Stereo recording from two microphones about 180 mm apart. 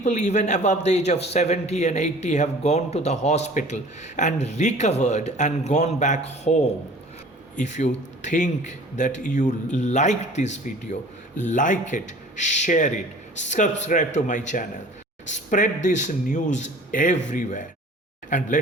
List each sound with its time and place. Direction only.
0.0 s a man's voice: 40° left (ahead or behind)